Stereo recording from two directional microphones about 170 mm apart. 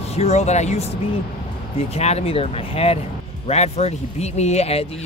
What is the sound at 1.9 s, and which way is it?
Speech, 40° left (ahead or behind).